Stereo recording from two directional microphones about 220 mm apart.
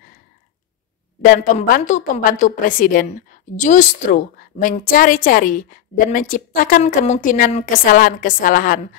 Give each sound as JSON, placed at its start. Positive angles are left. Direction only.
{"t": 1.2, "sound": "a woman's voice", "side_deg": 40}